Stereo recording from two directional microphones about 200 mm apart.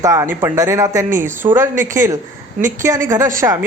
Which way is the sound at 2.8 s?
15° right (ahead or behind).